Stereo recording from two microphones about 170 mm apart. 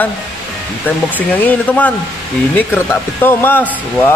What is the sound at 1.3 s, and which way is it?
Speech, 10° left (ahead or behind).